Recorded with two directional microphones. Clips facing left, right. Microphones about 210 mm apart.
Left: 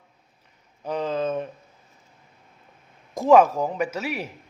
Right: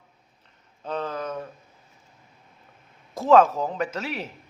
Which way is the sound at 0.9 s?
15° left (ahead or behind).